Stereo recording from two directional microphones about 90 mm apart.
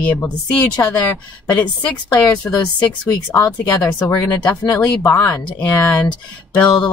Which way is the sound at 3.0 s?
40° left (ahead or behind).